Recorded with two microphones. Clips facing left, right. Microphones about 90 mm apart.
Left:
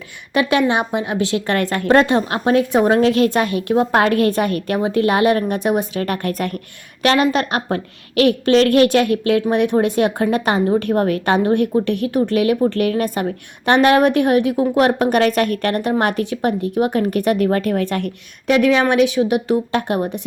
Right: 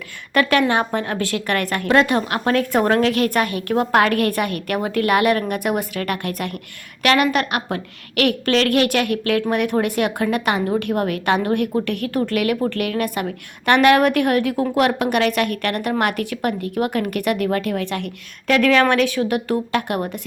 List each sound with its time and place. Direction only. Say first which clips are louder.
0.4 s a woman's voice: left 1 dB; 20° left (ahead or behind)
14.8 s a woman's voice: left 3 dB; 30° left (ahead or behind)
18.4 s a woman's voice: left 1 dB; 20° left (ahead or behind)